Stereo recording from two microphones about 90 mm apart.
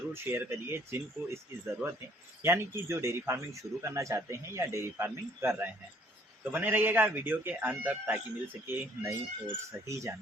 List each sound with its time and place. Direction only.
0.1 s speech: 30° right (ahead or behind)